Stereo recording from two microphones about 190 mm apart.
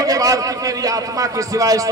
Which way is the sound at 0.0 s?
20° right (ahead or behind).